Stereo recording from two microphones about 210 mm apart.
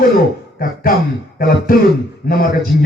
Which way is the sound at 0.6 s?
45° left (ahead or behind).